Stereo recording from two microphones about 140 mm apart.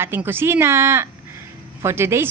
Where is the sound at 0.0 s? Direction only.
15° right (ahead or behind).